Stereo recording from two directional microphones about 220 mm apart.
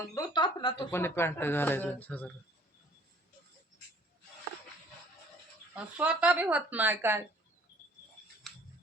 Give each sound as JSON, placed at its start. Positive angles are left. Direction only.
{"t": 0.1, "sound": "speech", "side_deg": 20}
{"t": 5.7, "sound": "speech", "side_deg": -5}
{"t": 8.4, "sound": "a sound", "side_deg": 0}